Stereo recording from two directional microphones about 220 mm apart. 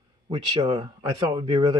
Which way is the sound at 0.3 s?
20° right (ahead or behind).